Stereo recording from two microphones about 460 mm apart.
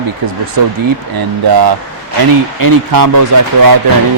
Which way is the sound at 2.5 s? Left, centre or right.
Right.